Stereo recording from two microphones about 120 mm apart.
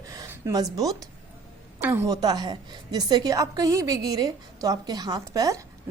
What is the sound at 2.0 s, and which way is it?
Speech, 35° right (ahead or behind).